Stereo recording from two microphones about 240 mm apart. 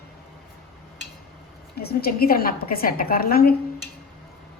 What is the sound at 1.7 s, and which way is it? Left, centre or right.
A woman's voice, left.